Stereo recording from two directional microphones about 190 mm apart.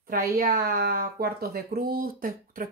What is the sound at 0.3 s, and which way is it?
A woman's voice, 50° right (ahead or behind).